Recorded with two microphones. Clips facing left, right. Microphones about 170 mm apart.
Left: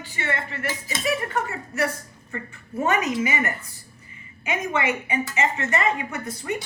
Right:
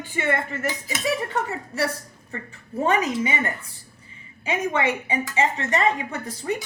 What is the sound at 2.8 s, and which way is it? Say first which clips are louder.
Speech: right 1 dB; 30° right (ahead or behind).